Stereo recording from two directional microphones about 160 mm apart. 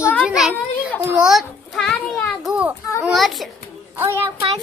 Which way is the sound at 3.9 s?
15° right (ahead or behind).